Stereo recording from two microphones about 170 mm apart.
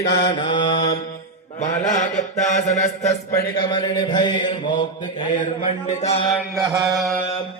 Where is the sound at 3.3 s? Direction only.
25° left (ahead or behind).